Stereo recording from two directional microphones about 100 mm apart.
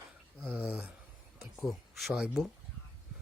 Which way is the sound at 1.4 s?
Centre (ahead or behind).